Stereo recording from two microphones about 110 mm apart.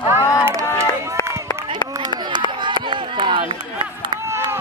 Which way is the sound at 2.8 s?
45° right (ahead or behind).